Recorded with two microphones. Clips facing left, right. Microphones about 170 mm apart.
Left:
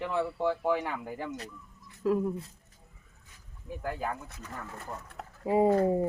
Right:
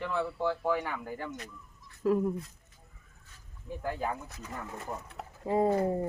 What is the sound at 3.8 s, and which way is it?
Speech, centre (ahead or behind).